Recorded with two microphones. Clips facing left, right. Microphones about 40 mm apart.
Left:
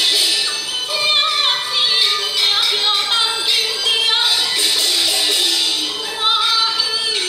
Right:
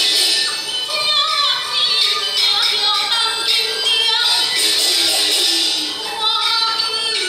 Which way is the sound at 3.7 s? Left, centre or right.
Left.